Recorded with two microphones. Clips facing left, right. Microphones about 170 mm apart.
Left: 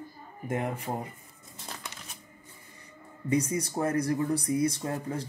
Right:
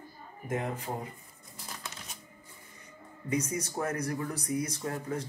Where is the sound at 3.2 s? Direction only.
30° left (ahead or behind).